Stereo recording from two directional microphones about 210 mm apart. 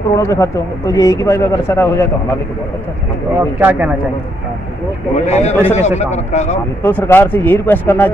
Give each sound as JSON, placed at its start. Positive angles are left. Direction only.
{"t": 0.1, "sound": "speech", "side_deg": 15}
{"t": 3.3, "sound": "speech", "side_deg": -10}
{"t": 5.2, "sound": "speech", "side_deg": 30}
{"t": 6.8, "sound": "speech", "side_deg": 10}